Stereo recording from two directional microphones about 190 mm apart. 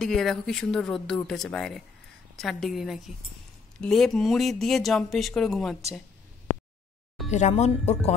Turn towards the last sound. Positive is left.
turn(degrees=35)  # may be behind; listen again after turning